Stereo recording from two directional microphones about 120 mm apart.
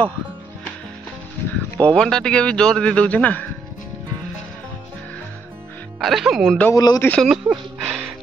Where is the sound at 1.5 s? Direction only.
10° left (ahead or behind).